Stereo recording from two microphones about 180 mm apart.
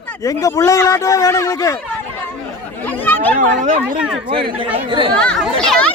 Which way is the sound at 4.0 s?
5° right (ahead or behind).